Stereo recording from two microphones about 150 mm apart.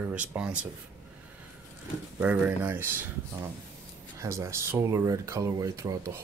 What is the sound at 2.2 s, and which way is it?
Speech, 10° right (ahead or behind).